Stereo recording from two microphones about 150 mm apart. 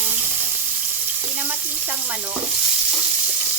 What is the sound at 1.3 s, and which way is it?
Frying, 10° right (ahead or behind).